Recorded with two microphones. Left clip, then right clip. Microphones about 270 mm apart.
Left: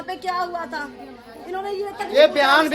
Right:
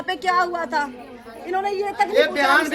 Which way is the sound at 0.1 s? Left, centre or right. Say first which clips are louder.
Right 5 dB; right.